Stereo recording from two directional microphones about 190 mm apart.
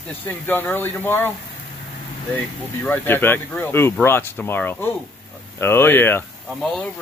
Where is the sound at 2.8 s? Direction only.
10° left (ahead or behind).